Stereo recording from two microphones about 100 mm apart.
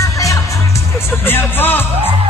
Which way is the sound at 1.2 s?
20° left (ahead or behind).